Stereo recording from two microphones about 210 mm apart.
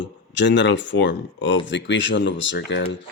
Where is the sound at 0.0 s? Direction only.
60° left (ahead or behind).